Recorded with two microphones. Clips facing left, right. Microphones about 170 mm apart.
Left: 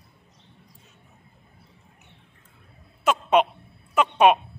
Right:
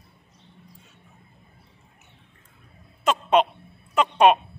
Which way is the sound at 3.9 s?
10° left (ahead or behind).